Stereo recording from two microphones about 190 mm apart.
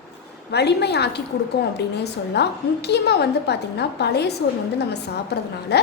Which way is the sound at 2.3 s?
60° left (ahead or behind).